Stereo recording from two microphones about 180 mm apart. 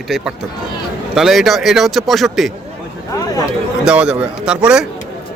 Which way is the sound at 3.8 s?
5° right (ahead or behind).